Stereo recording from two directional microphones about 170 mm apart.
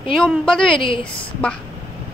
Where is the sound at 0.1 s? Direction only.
Centre (ahead or behind).